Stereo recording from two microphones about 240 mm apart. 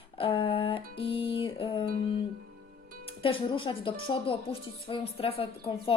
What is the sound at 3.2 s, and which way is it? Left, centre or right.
A woman's voice, left.